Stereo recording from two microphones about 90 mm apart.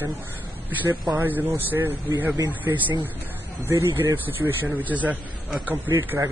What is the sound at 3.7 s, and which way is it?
Speech, 30° right (ahead or behind).